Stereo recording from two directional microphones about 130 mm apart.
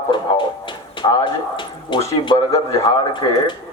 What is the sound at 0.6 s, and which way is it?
Music, 40° left (ahead or behind).